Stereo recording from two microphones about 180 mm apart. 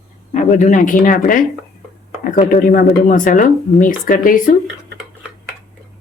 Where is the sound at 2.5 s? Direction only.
50° left (ahead or behind).